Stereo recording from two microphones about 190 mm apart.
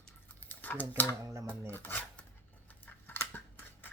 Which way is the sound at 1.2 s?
15° right (ahead or behind).